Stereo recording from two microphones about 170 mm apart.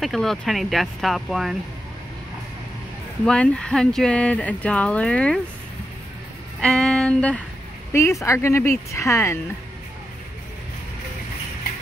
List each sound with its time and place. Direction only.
0.0 s speech: centre (ahead or behind)
3.3 s speech: 5° left (ahead or behind)
6.6 s speech: 5° left (ahead or behind)